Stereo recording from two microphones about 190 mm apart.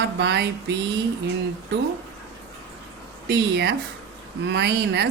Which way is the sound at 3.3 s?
60° right (ahead or behind).